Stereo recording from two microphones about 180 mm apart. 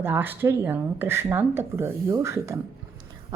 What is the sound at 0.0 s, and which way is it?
A woman's voice, 10° right (ahead or behind).